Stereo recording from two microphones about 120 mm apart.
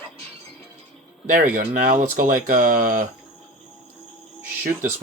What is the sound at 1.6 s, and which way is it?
Speech, 90° right.